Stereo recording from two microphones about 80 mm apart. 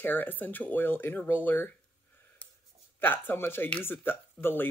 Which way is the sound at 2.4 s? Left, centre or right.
Left.